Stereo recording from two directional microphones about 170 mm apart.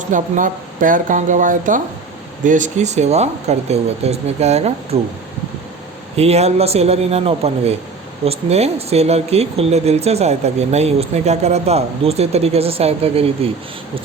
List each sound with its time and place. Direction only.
0.0 s speech: 50° right (ahead or behind)
6.1 s speech: 40° right (ahead or behind)